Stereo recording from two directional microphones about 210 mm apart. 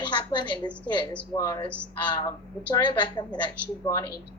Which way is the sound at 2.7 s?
20° left (ahead or behind).